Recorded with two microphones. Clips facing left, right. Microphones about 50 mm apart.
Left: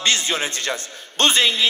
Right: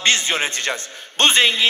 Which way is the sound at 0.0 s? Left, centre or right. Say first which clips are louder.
Right 2 dB; right.